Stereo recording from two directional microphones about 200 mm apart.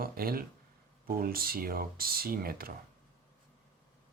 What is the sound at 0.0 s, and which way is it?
Speech, 45° right (ahead or behind).